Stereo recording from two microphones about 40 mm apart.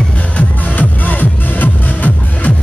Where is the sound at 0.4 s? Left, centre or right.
Left.